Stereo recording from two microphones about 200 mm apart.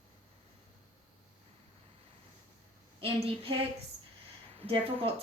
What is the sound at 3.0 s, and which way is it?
A woman's voice, 25° right (ahead or behind).